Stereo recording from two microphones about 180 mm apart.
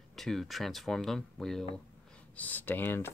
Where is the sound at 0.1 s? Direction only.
Centre (ahead or behind).